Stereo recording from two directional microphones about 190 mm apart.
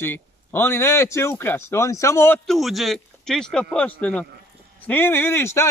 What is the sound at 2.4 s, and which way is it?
Speech, centre (ahead or behind).